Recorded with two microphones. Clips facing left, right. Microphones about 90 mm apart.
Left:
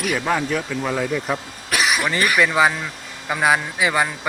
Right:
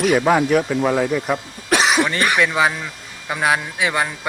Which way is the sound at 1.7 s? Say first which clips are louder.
Right 5 dB; 25° right (ahead or behind).